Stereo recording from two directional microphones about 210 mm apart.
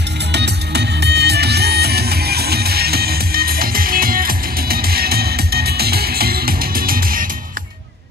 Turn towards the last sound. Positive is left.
turn(degrees=-45)  # may be behind; listen again after turning